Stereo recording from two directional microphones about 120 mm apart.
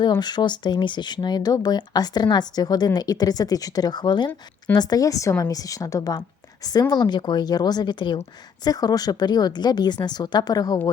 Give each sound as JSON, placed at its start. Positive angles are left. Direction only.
{"t": 0.0, "sound": "a woman's voice", "side_deg": 35}